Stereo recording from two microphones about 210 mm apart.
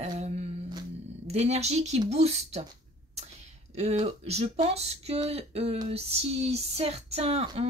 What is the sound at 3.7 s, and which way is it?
Speech, 30° right (ahead or behind).